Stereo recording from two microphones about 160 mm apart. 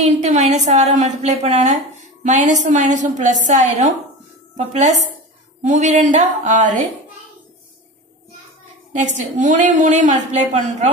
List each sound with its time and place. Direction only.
0.0 s a woman's voice: 45° right (ahead or behind)
9.0 s a woman's voice: 50° right (ahead or behind)